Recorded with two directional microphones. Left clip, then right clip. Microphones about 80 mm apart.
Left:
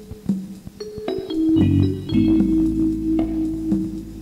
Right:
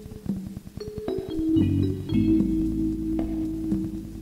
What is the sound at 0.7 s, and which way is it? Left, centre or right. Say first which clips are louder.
Keyboard: left 4 dB; left.